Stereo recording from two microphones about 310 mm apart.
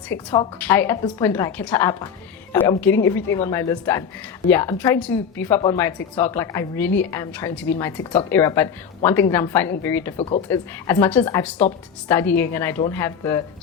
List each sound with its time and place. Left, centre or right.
0.1 s a woman's voice: left
0.6 s a woman's voice: centre
10.2 s speech: centre
10.5 s a woman's voice: centre